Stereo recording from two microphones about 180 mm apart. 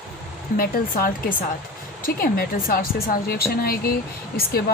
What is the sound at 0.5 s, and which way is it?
Speech, 55° left (ahead or behind).